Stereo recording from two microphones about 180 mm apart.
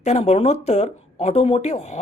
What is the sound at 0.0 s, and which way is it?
Speech, 35° left (ahead or behind).